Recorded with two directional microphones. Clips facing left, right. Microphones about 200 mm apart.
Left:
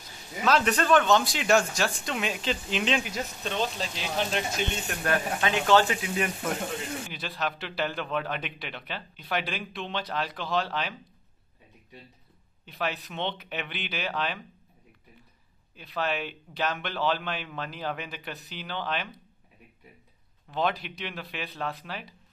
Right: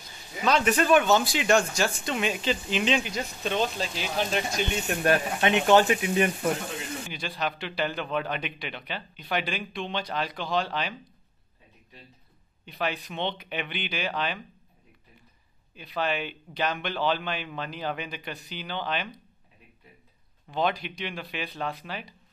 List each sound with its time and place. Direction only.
0.4 s a man's voice: centre (ahead or behind)
4.8 s speech: 25° right (ahead or behind)
7.1 s a man's voice: centre (ahead or behind)
12.6 s a man's voice: centre (ahead or behind)
15.7 s a man's voice: centre (ahead or behind)
20.4 s a man's voice: centre (ahead or behind)